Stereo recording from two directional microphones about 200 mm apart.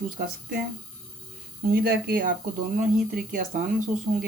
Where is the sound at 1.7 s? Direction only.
50° right (ahead or behind).